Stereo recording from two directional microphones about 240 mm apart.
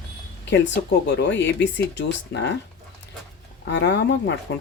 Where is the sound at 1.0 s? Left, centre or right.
Left.